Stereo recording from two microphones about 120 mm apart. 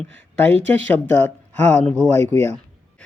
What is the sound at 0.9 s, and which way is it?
Speech, 15° left (ahead or behind).